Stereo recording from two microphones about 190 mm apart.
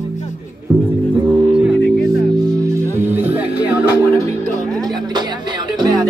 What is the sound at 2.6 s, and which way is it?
Music, 15° right (ahead or behind).